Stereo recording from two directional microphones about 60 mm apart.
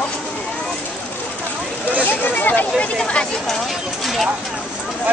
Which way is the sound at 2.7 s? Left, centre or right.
Centre.